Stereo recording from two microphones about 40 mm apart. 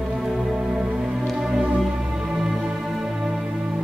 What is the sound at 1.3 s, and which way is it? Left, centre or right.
Music, centre.